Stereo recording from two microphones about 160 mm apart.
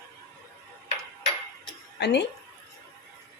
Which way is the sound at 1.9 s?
90° left.